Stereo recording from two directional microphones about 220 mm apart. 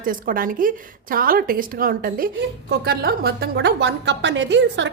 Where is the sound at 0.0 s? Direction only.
40° right (ahead or behind).